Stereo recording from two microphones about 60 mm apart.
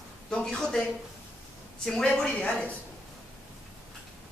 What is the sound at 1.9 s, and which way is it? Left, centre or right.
Speech, centre.